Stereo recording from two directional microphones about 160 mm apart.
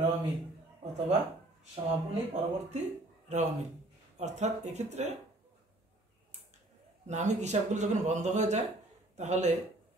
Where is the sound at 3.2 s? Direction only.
45° right (ahead or behind).